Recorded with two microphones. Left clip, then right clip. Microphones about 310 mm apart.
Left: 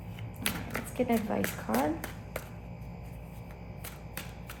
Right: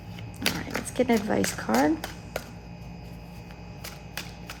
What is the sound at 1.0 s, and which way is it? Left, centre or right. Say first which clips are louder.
Speech: right 6 dB; right.